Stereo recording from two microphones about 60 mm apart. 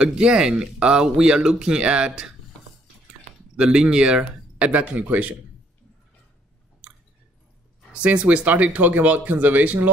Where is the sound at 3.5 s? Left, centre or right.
Centre.